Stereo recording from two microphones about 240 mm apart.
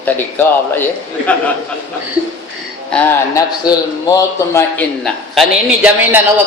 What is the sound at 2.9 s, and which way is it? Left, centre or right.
A man's voice, centre.